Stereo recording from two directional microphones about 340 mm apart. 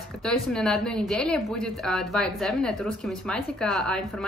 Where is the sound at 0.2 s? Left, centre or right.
Centre.